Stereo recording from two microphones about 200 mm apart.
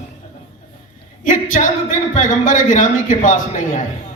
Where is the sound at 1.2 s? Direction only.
40° left (ahead or behind).